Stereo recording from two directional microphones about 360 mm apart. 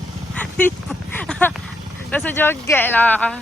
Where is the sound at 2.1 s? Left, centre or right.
Centre.